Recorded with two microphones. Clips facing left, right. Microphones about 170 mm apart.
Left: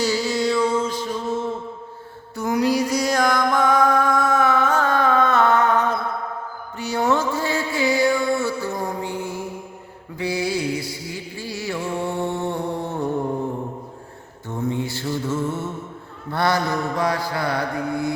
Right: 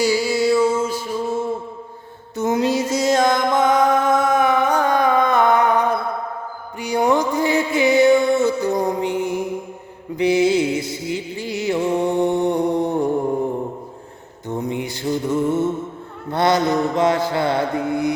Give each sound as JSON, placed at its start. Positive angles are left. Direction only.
{"t": 0.0, "sound": "music", "side_deg": -10}
{"t": 2.3, "sound": "music", "side_deg": -20}
{"t": 14.4, "sound": "mantra", "side_deg": -15}